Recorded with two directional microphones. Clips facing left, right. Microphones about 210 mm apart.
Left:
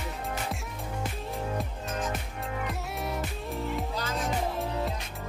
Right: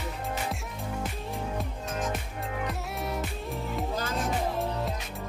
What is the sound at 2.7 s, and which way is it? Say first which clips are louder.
Music: even; centre (ahead or behind).